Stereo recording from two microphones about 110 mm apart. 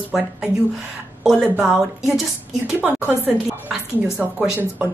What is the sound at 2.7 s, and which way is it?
A woman's voice, 15° right (ahead or behind).